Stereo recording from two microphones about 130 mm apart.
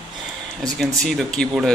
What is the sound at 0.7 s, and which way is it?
Speech, 5° left (ahead or behind).